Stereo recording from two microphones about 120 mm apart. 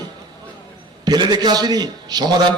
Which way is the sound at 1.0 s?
35° right (ahead or behind).